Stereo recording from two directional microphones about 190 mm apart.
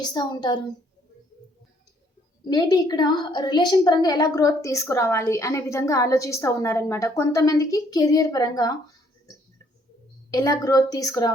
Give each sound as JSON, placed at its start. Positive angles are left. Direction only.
{"t": 0.0, "sound": "a woman's voice", "side_deg": 20}
{"t": 2.5, "sound": "a woman's voice", "side_deg": 20}
{"t": 10.3, "sound": "a woman's voice", "side_deg": 20}